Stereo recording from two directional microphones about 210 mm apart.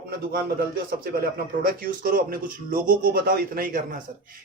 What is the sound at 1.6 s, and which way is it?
Speech, 45° right (ahead or behind).